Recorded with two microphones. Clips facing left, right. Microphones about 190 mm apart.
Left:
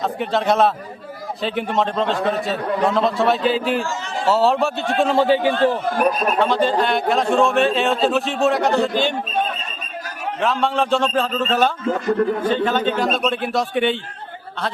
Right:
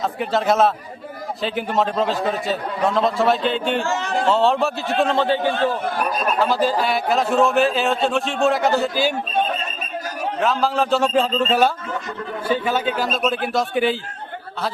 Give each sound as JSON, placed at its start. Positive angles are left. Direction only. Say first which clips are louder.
{"t": 0.0, "sound": "speech", "louder": "even", "side_deg": 0}
{"t": 3.8, "sound": "speech", "louder": "right 4 dB", "side_deg": -60}
{"t": 4.3, "sound": "speech", "louder": "left 2 dB", "side_deg": 0}
{"t": 6.4, "sound": "speech", "louder": "left 1 dB", "side_deg": -5}
{"t": 10.4, "sound": "speech", "louder": "left 1 dB", "side_deg": 0}
{"t": 11.1, "sound": "speech", "louder": "right 2 dB", "side_deg": -15}
{"t": 11.9, "sound": "a man's voice", "louder": "left 10 dB", "side_deg": 60}
{"t": 12.5, "sound": "speech", "louder": "left 2 dB", "side_deg": -10}